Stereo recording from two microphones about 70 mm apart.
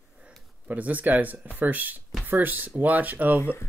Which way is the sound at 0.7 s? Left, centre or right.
Right.